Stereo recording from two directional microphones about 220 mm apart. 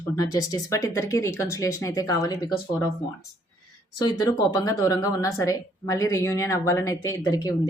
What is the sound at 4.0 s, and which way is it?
A woman's voice, 20° left (ahead or behind).